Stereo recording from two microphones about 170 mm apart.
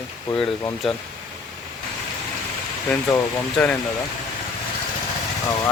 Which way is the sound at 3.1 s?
10° left (ahead or behind).